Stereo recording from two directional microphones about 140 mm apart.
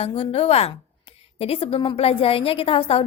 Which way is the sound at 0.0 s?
45° left (ahead or behind).